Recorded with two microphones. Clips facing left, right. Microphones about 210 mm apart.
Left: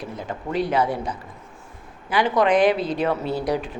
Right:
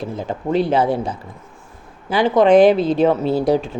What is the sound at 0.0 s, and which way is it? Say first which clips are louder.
Speech: right 6 dB; 25° right (ahead or behind).